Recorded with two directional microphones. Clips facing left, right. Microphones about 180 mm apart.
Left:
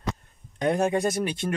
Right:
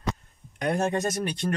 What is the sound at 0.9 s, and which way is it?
Speech, 10° left (ahead or behind).